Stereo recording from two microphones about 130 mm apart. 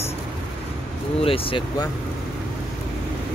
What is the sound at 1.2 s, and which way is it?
Speech, 45° left (ahead or behind).